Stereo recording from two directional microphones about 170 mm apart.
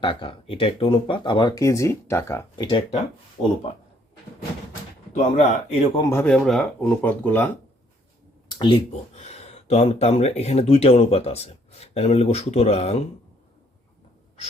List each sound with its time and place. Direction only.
0.0 s speech: 30° left (ahead or behind)
2.6 s speech: 30° left (ahead or behind)
5.1 s speech: 40° left (ahead or behind)
6.0 s speech: 15° left (ahead or behind)
6.2 s speech: 5° left (ahead or behind)
8.4 s speech: 25° left (ahead or behind)